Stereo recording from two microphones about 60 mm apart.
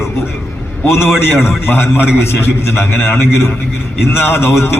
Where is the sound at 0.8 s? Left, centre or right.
Left.